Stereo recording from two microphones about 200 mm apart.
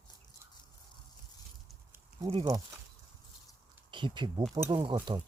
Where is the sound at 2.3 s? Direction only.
20° right (ahead or behind).